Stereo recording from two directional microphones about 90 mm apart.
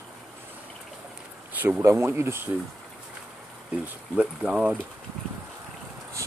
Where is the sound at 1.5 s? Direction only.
20° right (ahead or behind).